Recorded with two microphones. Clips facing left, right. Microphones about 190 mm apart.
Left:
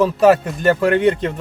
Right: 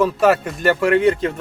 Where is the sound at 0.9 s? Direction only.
30° left (ahead or behind).